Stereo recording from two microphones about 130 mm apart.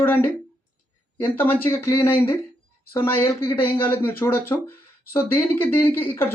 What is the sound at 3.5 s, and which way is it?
Speech, 45° left (ahead or behind).